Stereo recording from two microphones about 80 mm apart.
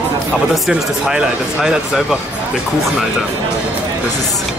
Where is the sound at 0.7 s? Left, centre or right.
Centre.